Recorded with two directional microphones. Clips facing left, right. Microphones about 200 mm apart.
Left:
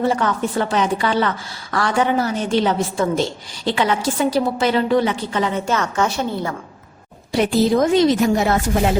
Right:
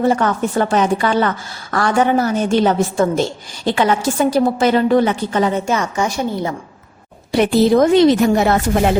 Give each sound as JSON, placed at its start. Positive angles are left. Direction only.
{"t": 0.1, "sound": "a woman's voice", "side_deg": -50}
{"t": 5.6, "sound": "a woman's voice", "side_deg": -10}
{"t": 7.3, "sound": "speech", "side_deg": -65}